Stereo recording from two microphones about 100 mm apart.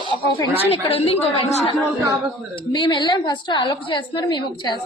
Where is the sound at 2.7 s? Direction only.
50° left (ahead or behind).